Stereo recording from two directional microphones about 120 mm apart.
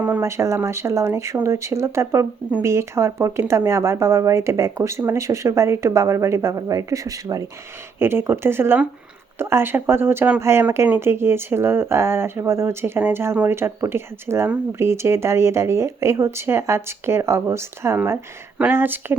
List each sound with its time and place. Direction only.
0.0 s speech: 20° right (ahead or behind)